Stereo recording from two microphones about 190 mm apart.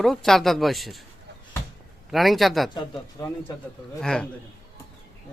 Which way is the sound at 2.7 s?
20° left (ahead or behind).